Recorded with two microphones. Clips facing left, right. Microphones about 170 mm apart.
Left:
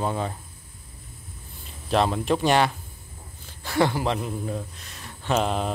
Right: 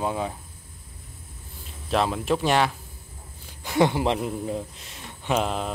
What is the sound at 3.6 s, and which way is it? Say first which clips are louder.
Speech: right 2 dB; 20° right (ahead or behind).